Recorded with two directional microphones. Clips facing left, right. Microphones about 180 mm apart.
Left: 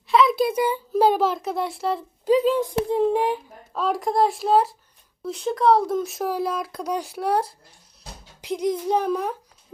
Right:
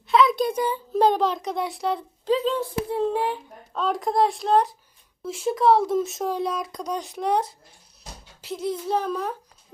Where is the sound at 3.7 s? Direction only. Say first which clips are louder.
Left 1 dB; centre (ahead or behind).